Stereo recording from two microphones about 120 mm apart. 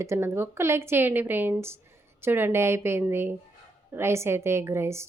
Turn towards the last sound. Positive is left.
turn(degrees=-20)  # may be behind; listen again after turning